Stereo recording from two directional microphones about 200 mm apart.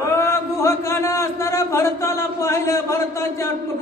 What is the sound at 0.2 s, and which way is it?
A man's voice, 15° left (ahead or behind).